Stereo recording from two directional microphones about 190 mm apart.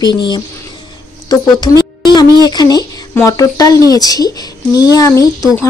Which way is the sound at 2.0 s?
20° left (ahead or behind).